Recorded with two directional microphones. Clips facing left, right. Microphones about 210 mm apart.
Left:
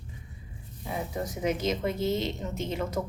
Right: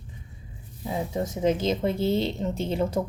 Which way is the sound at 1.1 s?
25° right (ahead or behind).